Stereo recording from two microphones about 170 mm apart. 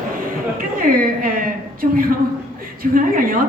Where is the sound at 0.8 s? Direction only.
55° right (ahead or behind).